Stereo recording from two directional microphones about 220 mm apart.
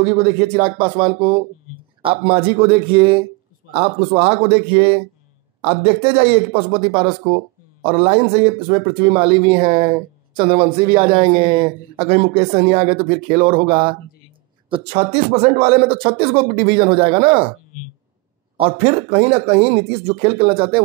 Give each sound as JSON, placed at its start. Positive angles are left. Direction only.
{"t": 0.0, "sound": "a man's voice", "side_deg": -30}
{"t": 18.6, "sound": "a man's voice", "side_deg": -30}